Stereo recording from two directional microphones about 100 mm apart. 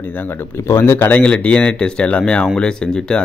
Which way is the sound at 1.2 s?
10° left (ahead or behind).